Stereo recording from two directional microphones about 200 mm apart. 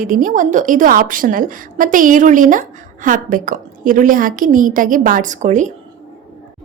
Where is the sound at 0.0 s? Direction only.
45° right (ahead or behind).